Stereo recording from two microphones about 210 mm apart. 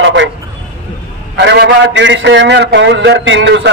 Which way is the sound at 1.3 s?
55° right (ahead or behind).